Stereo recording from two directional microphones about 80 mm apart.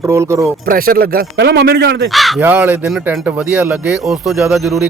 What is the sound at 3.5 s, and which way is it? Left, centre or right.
Speech, centre.